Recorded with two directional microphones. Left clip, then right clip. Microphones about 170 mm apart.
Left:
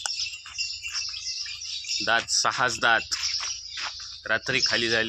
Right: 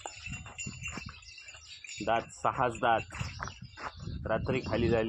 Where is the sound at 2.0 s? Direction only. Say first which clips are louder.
Left 6 dB; 10° left (ahead or behind).